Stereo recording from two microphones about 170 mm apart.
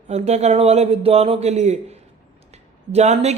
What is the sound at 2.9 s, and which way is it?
Speech, 40° right (ahead or behind).